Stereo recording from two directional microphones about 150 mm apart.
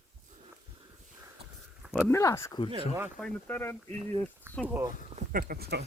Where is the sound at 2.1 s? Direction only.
20° left (ahead or behind).